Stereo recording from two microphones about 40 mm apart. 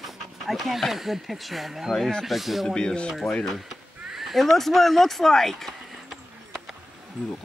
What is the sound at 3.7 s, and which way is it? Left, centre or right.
Neigh, centre.